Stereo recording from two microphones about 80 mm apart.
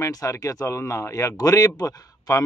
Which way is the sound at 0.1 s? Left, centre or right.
Left.